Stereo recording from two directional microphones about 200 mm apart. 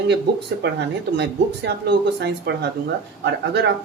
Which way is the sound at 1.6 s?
60° right (ahead or behind).